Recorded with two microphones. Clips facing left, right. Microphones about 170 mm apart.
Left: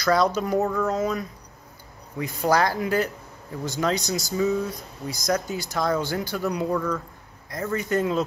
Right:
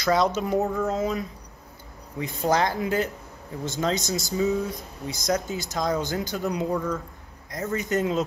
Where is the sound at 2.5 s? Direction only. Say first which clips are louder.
Left 2 dB; 20° right (ahead or behind).